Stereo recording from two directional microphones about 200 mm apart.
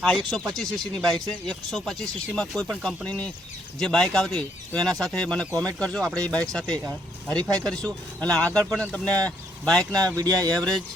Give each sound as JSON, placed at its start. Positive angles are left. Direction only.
{"t": 0.3, "sound": "speech", "side_deg": 0}
{"t": 10.2, "sound": "speech", "side_deg": -20}
{"t": 10.6, "sound": "speech", "side_deg": 5}